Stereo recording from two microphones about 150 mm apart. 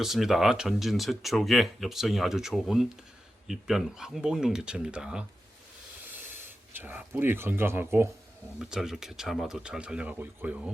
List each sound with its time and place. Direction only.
0.0 s speech: centre (ahead or behind)
6.7 s speech: 15° right (ahead or behind)
8.5 s speech: 5° right (ahead or behind)